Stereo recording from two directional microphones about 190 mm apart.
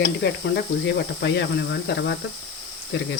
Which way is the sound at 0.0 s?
65° left (ahead or behind).